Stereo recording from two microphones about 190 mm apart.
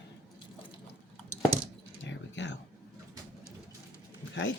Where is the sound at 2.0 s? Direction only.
75° left (ahead or behind).